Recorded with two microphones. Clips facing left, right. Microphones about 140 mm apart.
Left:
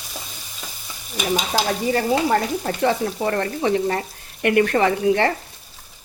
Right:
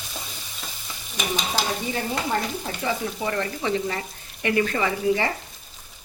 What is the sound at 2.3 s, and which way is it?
Speech, 65° left (ahead or behind).